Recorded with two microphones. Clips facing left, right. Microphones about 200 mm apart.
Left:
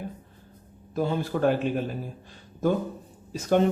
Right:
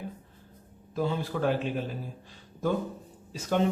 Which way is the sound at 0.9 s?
50° left (ahead or behind).